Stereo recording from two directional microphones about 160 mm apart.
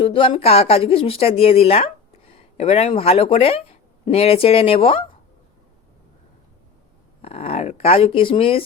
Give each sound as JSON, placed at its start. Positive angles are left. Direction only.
{"t": 0.0, "sound": "speech", "side_deg": 35}
{"t": 7.2, "sound": "speech", "side_deg": 40}